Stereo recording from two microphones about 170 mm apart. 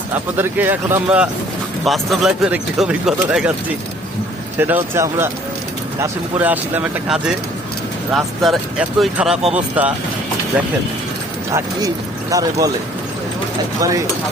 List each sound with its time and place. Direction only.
0.3 s speech: 10° right (ahead or behind)
1.8 s speech: centre (ahead or behind)
4.5 s speech: 10° right (ahead or behind)
12.3 s speech: 20° right (ahead or behind)